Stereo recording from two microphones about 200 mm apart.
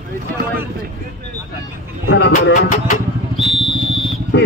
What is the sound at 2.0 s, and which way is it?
Speech, 60° left (ahead or behind).